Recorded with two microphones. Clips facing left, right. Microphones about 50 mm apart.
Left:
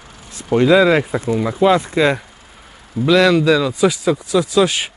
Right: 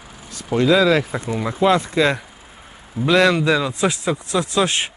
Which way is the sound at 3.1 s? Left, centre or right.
Right.